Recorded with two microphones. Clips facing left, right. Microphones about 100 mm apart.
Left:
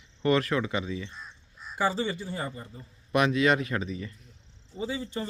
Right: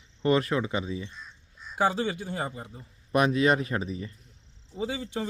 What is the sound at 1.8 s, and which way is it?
Speech, 55° right (ahead or behind).